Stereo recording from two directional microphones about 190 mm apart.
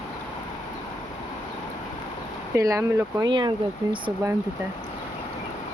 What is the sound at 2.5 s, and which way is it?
Speech, 15° right (ahead or behind).